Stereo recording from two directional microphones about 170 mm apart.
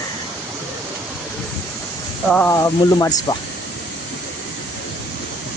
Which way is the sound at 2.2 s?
10° left (ahead or behind).